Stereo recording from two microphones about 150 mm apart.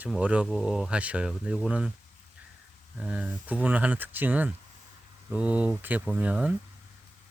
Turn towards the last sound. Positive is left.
turn(degrees=-5)  # may be behind; listen again after turning